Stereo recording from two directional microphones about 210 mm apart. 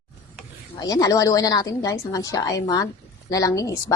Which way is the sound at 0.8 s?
15° left (ahead or behind).